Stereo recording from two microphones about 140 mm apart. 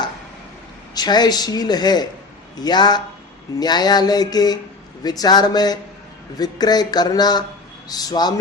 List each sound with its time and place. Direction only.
0.9 s a man's voice: 30° left (ahead or behind)